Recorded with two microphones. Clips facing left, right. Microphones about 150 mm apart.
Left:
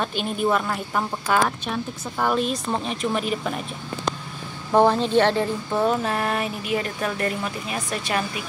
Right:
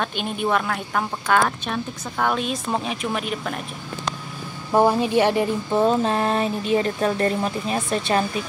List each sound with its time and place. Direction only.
0.2 s speech: centre (ahead or behind)
4.7 s speech: 10° right (ahead or behind); by 8.5 s 30° right (ahead or behind)